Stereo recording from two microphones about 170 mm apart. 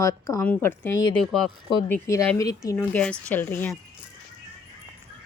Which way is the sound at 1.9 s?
15° left (ahead or behind).